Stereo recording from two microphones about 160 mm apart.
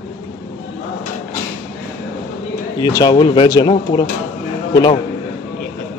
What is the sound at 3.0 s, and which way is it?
Speech, 25° left (ahead or behind).